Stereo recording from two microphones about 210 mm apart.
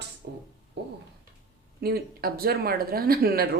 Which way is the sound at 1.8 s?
45° right (ahead or behind).